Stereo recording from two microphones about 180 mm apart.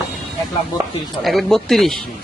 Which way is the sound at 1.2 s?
Centre (ahead or behind).